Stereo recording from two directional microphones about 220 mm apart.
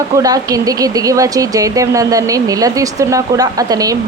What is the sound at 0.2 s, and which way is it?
Speech, 15° right (ahead or behind).